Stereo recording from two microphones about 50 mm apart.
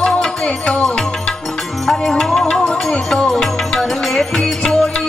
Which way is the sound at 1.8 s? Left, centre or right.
Centre.